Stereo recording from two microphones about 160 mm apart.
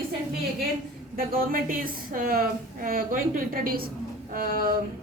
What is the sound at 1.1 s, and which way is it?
A woman's voice, 65° right (ahead or behind).